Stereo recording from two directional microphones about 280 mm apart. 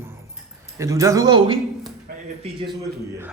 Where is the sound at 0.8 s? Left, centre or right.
Centre.